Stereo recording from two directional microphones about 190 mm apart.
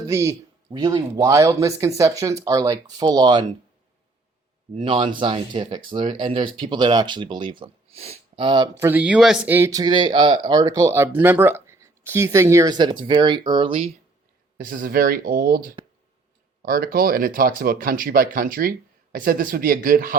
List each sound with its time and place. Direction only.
0.1 s speech: 15° right (ahead or behind)
4.8 s speech: 25° right (ahead or behind)
8.8 s speech: 10° right (ahead or behind); by 13.9 s 30° right (ahead or behind)
14.6 s speech: 45° right (ahead or behind)